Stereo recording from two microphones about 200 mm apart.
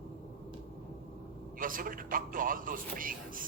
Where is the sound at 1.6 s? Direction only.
45° right (ahead or behind).